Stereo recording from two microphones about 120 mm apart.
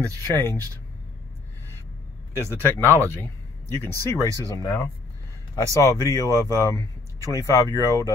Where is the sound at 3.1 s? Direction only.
20° left (ahead or behind).